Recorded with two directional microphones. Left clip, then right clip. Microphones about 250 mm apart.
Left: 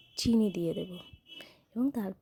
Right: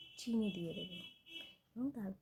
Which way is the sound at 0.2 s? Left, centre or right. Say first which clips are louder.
Left 12 dB; left.